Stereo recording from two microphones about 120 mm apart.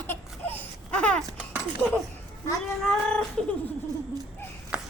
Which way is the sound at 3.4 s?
5° left (ahead or behind).